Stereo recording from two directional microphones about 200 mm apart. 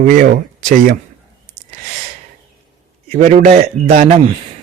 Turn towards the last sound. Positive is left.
turn(degrees=-30)  # may be behind; listen again after turning